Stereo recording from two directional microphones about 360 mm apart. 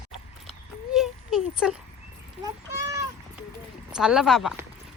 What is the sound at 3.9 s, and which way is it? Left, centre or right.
Speech, centre.